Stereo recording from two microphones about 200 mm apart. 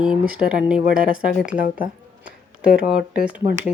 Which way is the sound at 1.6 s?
45° left (ahead or behind).